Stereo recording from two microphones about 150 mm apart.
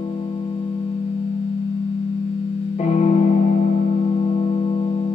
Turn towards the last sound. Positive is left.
turn(degrees=50)  # may be behind; listen again after turning